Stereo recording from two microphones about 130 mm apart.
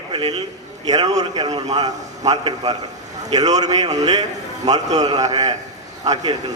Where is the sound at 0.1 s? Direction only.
40° right (ahead or behind).